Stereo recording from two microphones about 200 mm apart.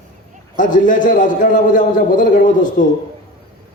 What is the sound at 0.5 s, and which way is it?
A man's voice, 40° left (ahead or behind).